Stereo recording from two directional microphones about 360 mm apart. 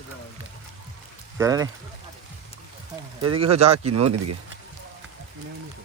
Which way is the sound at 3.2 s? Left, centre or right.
Centre.